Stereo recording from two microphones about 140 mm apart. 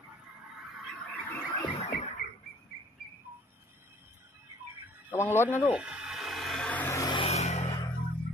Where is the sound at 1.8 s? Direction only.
55° left (ahead or behind).